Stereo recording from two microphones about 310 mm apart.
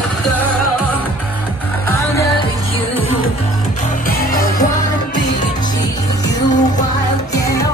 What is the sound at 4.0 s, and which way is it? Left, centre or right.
Music, left.